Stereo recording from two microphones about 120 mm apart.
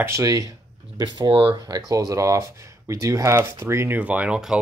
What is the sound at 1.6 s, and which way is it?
Speech, 30° right (ahead or behind).